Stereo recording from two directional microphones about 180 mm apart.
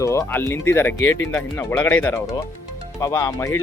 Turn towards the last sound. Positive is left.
turn(degrees=15)  # may be behind; listen again after turning